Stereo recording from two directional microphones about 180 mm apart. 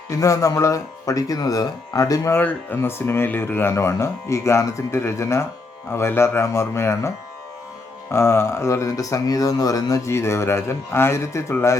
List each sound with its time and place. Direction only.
0.2 s speech: 20° left (ahead or behind)
8.1 s speech: 15° left (ahead or behind)